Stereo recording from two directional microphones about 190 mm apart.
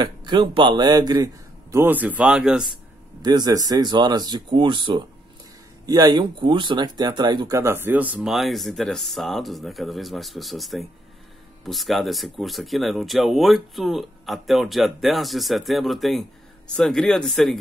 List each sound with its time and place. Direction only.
0.0 s a man's voice: 25° right (ahead or behind); by 2.7 s 5° right (ahead or behind)
3.2 s a man's voice: 20° right (ahead or behind); by 17.6 s centre (ahead or behind)